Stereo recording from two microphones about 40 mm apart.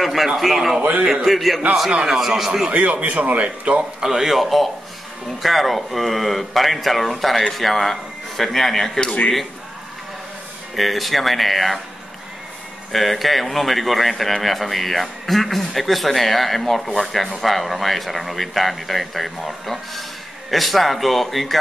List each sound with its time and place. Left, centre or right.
0.0 s a man's voice: centre
1.9 s a man's voice: right
2.1 s a man's voice: centre
2.7 s a man's voice: right
4.0 s a man's voice: centre
10.8 s speech: centre
12.9 s speech: centre